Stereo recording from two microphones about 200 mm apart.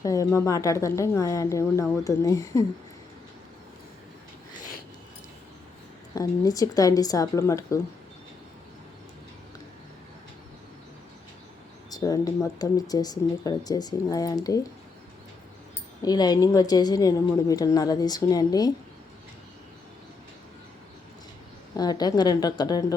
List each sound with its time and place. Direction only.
0.0 s speech: 15° left (ahead or behind)
6.1 s speech: 20° left (ahead or behind)
11.9 s speech: 20° left (ahead or behind)
16.0 s speech: 20° left (ahead or behind)
21.8 s speech: 20° left (ahead or behind)